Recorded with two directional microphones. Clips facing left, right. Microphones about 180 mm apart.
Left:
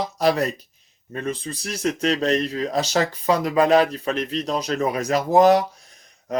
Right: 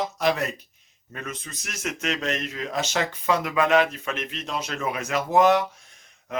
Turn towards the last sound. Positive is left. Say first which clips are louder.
# left 7 dB
turn(degrees=35)  # may be behind; listen again after turning